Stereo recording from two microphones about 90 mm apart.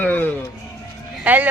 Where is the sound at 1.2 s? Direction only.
20° right (ahead or behind).